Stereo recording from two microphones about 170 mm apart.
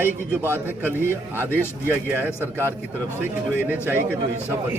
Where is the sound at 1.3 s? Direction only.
10° left (ahead or behind).